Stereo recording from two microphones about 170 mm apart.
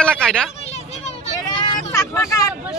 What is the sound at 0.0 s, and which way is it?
Hubbub, 5° left (ahead or behind).